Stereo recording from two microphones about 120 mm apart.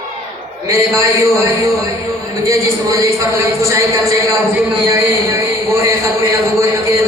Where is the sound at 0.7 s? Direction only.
25° right (ahead or behind).